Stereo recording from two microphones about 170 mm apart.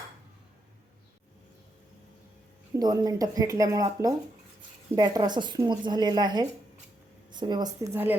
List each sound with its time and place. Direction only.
2.7 s speech: 25° right (ahead or behind)